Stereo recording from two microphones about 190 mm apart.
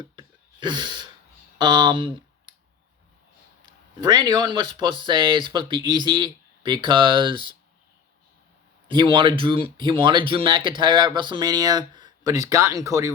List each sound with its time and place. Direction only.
0.0 s gasp: 25° right (ahead or behind)
1.5 s speech: 25° right (ahead or behind)
4.0 s speech: 20° right (ahead or behind)
8.9 s speech: 25° right (ahead or behind)